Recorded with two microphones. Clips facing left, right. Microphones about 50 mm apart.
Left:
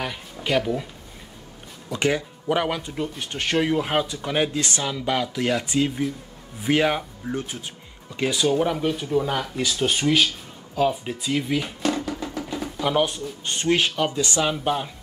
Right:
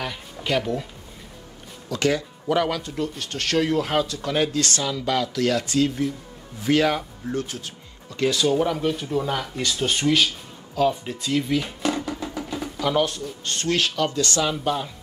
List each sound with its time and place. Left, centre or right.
0.0 s a sound: centre
1.9 s speech: left
11.8 s music: centre
12.8 s speech: centre